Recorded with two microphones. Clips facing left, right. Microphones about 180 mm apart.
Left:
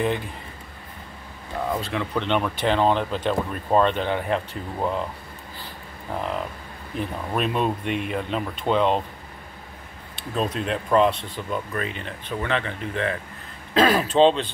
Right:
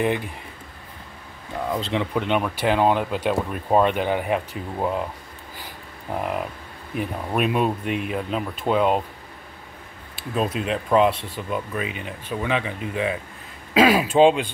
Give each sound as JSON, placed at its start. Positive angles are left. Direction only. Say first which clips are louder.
{"t": 1.8, "sound": "speech", "louder": "right 3 dB", "side_deg": -20}
{"t": 2.1, "sound": "speech", "louder": "left 2 dB", "side_deg": -5}
{"t": 6.1, "sound": "speech", "louder": "right 2 dB", "side_deg": -10}
{"t": 10.1, "sound": "speech", "louder": "right 1 dB", "side_deg": -5}